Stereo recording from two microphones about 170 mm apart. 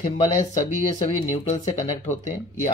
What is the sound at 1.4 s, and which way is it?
Speech, 45° left (ahead or behind).